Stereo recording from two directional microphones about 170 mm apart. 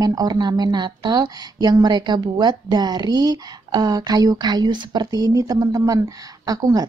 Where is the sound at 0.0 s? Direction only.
20° right (ahead or behind).